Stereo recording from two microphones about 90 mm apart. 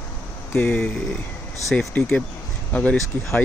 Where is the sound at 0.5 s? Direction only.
20° left (ahead or behind).